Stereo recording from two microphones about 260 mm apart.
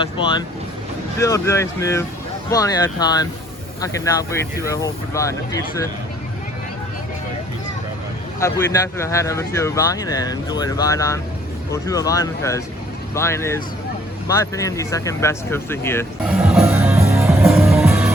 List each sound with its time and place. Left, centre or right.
0.0 s speech: centre
8.4 s speech: centre
16.2 s music: centre